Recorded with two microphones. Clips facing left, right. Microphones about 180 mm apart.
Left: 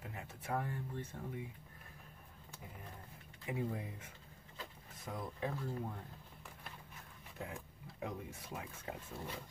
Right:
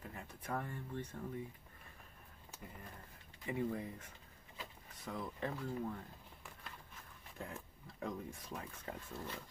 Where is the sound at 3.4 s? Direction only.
10° left (ahead or behind).